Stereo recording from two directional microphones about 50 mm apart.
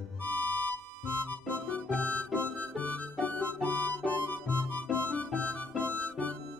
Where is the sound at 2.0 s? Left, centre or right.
Left.